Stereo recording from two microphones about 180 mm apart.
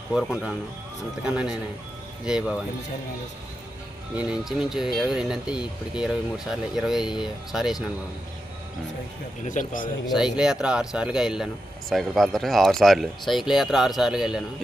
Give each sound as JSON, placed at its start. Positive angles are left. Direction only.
{"t": 0.1, "sound": "speech", "side_deg": -5}
{"t": 4.1, "sound": "speech", "side_deg": -5}
{"t": 9.4, "sound": "a man's voice", "side_deg": 45}
{"t": 10.1, "sound": "speech", "side_deg": -5}